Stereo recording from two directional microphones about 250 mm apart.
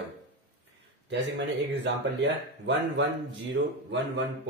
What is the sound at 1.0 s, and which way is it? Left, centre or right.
Speech, right.